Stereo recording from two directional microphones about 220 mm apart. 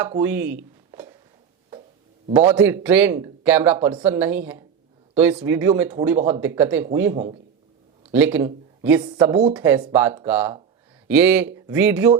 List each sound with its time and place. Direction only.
0.1 s speech: 10° right (ahead or behind)
2.3 s a man's voice: 10° right (ahead or behind)
3.8 s a woman's voice: 20° right (ahead or behind)
4.0 s a man's voice: 10° right (ahead or behind)
6.1 s a woman's voice: 30° right (ahead or behind)
6.4 s a man's voice: 10° right (ahead or behind)
8.4 s a sound: 10° right (ahead or behind)
9.0 s a woman's voice: 20° right (ahead or behind)